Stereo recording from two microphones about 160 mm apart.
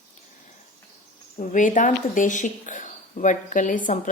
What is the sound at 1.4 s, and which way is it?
Speech, 55° left (ahead or behind).